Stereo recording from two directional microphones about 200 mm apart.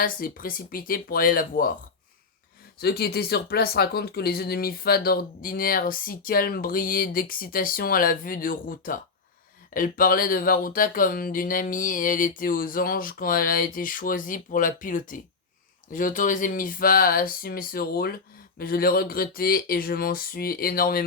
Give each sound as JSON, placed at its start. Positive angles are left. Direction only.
{"t": 0.0, "sound": "speech", "side_deg": 45}
{"t": 2.8, "sound": "speech", "side_deg": 50}